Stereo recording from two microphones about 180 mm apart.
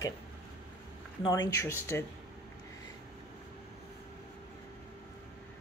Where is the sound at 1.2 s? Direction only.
20° left (ahead or behind).